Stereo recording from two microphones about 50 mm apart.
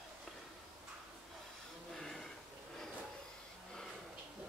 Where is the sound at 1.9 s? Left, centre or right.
Centre.